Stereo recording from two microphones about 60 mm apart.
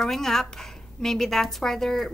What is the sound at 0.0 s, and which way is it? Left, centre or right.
Speech, centre.